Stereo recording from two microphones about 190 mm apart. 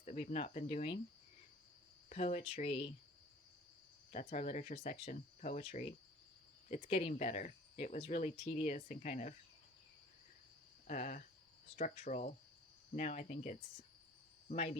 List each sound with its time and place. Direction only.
0.0 s speech: 40° left (ahead or behind)
2.0 s speech: 35° left (ahead or behind)
4.1 s speech: 40° left (ahead or behind)
10.8 s speech: 40° left (ahead or behind)